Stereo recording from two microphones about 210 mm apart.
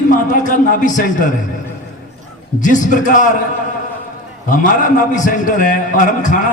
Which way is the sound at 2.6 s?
35° left (ahead or behind).